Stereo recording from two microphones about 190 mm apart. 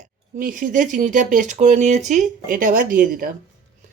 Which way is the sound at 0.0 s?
45° right (ahead or behind).